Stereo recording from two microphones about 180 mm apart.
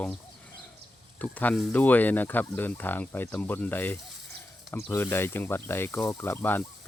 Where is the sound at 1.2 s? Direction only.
10° left (ahead or behind).